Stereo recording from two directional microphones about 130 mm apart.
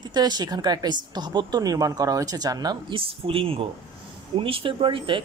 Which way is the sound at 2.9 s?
45° right (ahead or behind).